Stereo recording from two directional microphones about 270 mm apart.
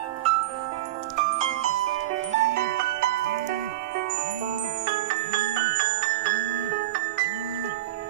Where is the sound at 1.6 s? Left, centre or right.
Right.